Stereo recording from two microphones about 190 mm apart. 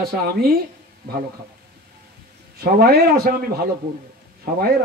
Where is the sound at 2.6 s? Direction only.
55° right (ahead or behind).